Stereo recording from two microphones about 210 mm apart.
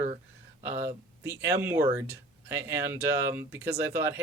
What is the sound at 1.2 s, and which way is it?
Speech, 15° right (ahead or behind).